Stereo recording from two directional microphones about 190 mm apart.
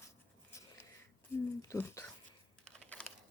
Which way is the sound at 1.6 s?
15° left (ahead or behind).